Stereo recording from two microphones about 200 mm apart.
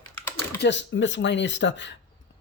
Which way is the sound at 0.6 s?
65° left (ahead or behind).